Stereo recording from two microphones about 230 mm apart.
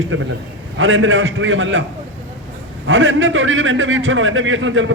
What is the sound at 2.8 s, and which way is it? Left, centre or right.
A man's voice, right.